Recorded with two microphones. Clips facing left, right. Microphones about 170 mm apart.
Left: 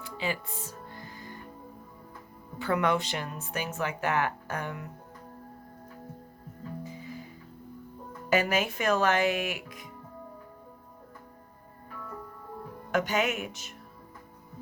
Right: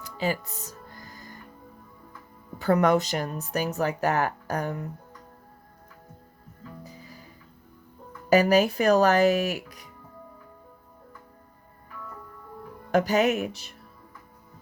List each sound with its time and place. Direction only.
0.0 s music: 40° right (ahead or behind)
2.6 s a woman's voice: 40° right (ahead or behind)
6.8 s music: 40° right (ahead or behind)
8.3 s a woman's voice: 35° right (ahead or behind)
12.9 s a woman's voice: 35° right (ahead or behind)